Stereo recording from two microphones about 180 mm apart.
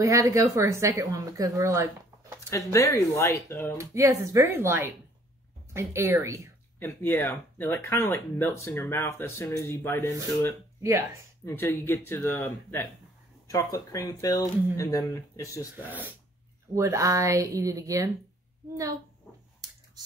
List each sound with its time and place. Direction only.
0.0 s speech: 15° right (ahead or behind)
2.5 s speech: 15° left (ahead or behind)
3.9 s speech: 15° right (ahead or behind)
6.8 s speech: 10° left (ahead or behind)
10.8 s speech: 15° right (ahead or behind)
11.4 s speech: 15° left (ahead or behind)
15.9 s speech: 10° right (ahead or behind)